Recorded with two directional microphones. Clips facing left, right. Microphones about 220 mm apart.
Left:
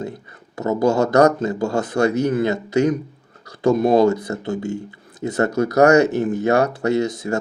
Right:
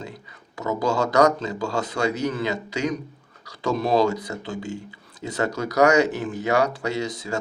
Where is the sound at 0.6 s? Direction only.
50° left (ahead or behind).